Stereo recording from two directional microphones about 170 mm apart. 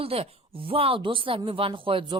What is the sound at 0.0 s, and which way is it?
Speech, 35° right (ahead or behind).